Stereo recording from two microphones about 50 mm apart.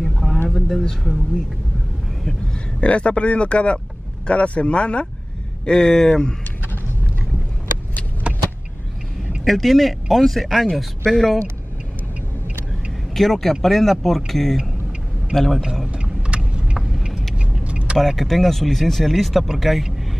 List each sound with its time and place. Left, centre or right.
0.0 s a sound: centre
0.7 s speech: centre
2.8 s a man's voice: left
8.3 s vehicle: right
9.4 s speech: centre
11.1 s speech: centre
13.1 s speech: centre
15.6 s speech: centre
15.9 s vehicle: right
17.6 s vehicle: right
17.9 s speech: centre